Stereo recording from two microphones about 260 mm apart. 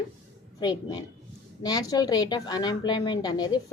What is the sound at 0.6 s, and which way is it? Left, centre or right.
A woman's voice, centre.